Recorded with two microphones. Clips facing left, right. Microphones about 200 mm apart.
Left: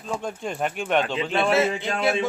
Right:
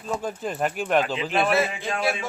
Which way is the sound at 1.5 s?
25° left (ahead or behind).